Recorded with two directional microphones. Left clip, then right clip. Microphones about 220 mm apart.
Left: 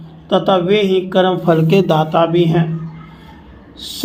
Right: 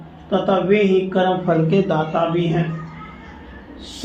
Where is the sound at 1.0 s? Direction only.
55° left (ahead or behind).